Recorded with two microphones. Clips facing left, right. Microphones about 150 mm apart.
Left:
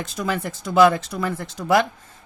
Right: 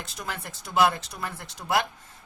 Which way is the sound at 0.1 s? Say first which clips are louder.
Left 11 dB; 90° left.